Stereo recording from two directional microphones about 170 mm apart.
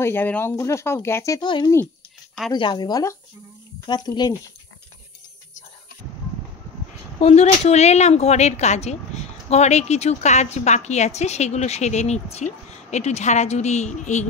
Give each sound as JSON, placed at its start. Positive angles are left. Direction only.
{"t": 0.0, "sound": "speech", "side_deg": 10}
{"t": 7.2, "sound": "speech", "side_deg": 40}